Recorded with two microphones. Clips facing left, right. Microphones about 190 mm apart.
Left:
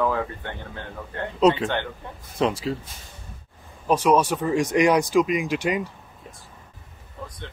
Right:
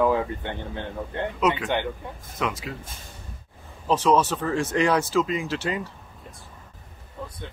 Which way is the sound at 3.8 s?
10° left (ahead or behind).